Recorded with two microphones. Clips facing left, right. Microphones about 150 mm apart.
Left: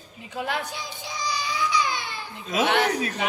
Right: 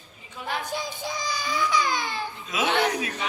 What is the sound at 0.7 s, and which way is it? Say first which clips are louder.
Child singing: right 3 dB; 50° right (ahead or behind).